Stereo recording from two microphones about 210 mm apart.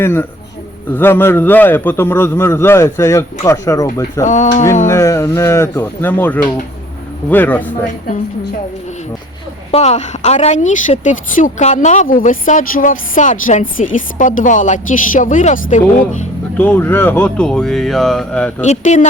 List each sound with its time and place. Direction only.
0.0 s a man's voice: 10° left (ahead or behind)
9.7 s a woman's voice: 30° left (ahead or behind)
16.6 s speech: 10° left (ahead or behind)
18.6 s a woman's voice: 35° left (ahead or behind)